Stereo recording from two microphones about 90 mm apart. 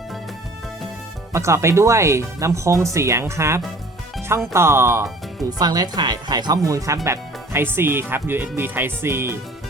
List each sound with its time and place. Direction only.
1.3 s speech: 30° right (ahead or behind)
5.5 s speech: 45° right (ahead or behind); by 9.4 s 25° right (ahead or behind)